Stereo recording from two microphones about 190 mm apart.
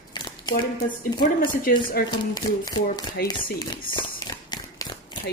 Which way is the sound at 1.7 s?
50° left (ahead or behind).